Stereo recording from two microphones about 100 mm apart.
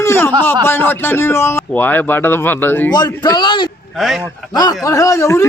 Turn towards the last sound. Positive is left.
turn(degrees=30)  # may be behind; listen again after turning